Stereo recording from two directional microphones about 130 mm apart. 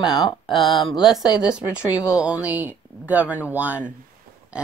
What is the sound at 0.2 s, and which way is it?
Speech, centre (ahead or behind).